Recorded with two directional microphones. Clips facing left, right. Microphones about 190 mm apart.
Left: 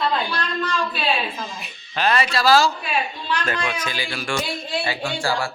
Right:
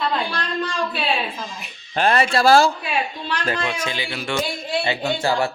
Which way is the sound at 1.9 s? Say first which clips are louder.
Right 3 dB; 50° right (ahead or behind).